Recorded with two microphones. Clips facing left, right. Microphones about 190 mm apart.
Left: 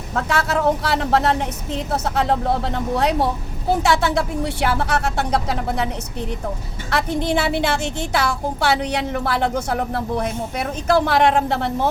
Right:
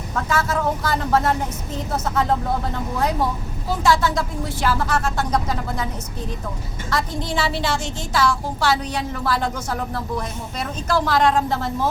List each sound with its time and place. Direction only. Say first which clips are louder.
0.2 s speech: left 2 dB; 70° left (ahead or behind)
3.7 s a woman's voice: left 1 dB; 65° left (ahead or behind)
6.9 s a woman's voice: left 4 dB; 60° left (ahead or behind)